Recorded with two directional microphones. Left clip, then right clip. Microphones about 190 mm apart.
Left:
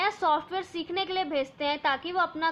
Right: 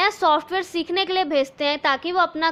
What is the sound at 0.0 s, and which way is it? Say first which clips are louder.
A woman's voice: right 7 dB; 40° right (ahead or behind).